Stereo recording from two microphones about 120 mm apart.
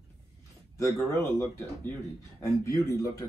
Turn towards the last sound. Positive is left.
turn(degrees=25)  # may be behind; listen again after turning